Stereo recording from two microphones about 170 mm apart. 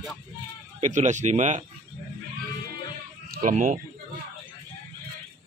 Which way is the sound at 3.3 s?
55° right (ahead or behind).